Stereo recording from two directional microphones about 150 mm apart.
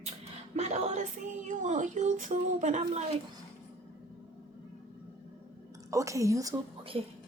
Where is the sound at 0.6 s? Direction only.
45° right (ahead or behind).